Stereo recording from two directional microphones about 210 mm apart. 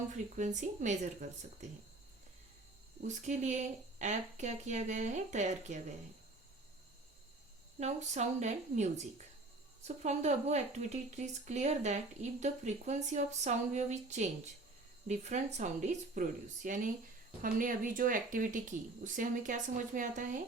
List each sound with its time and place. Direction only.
0.3 s speech: 35° right (ahead or behind)
3.0 s speech: 35° right (ahead or behind)
7.8 s speech: 35° right (ahead or behind)